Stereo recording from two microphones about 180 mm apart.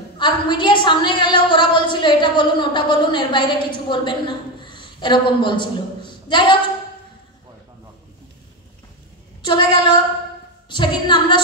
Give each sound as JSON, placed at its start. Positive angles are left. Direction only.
{"t": 0.2, "sound": "a woman's voice", "side_deg": 25}
{"t": 9.4, "sound": "a woman's voice", "side_deg": 25}